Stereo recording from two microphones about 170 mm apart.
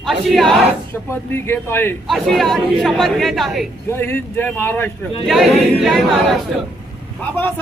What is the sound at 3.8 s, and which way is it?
Speech, 15° left (ahead or behind).